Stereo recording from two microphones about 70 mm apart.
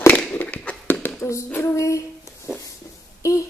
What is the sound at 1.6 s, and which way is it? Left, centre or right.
Speech, left.